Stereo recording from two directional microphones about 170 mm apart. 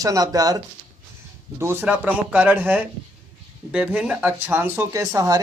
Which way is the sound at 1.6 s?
15° right (ahead or behind).